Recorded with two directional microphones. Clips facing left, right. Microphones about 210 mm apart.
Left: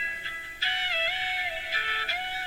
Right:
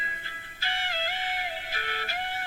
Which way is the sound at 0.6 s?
50° right (ahead or behind).